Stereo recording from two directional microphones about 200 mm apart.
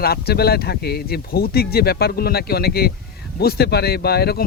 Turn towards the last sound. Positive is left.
turn(degrees=50)  # may be behind; listen again after turning